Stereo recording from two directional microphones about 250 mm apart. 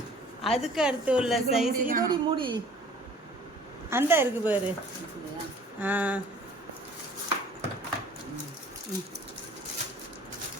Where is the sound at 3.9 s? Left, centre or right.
Centre.